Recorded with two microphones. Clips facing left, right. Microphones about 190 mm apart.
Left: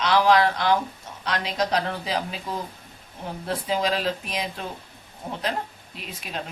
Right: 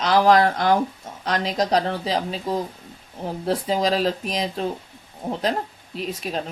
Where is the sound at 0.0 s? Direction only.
45° right (ahead or behind).